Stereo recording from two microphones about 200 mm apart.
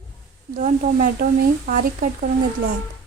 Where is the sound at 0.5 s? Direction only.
40° right (ahead or behind).